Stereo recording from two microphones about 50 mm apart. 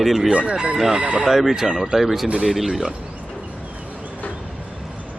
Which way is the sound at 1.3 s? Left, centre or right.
Centre.